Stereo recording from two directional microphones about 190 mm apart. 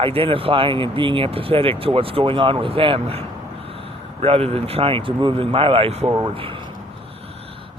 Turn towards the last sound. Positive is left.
turn(degrees=-25)  # may be behind; listen again after turning